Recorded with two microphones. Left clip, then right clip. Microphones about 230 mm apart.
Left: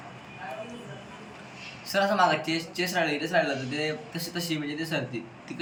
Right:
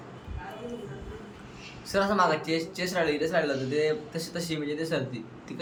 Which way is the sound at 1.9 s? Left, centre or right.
Right.